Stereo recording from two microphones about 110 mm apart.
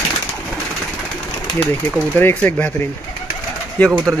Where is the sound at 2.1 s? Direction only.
15° left (ahead or behind).